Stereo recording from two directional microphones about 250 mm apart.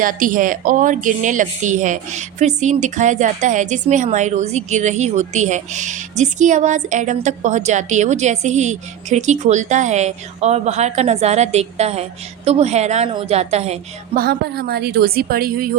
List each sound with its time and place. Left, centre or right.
0.0 s a woman's voice: right
14.3 s a woman's voice: right